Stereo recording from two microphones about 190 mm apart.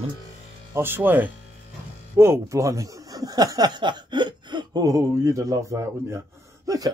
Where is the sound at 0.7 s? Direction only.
10° right (ahead or behind).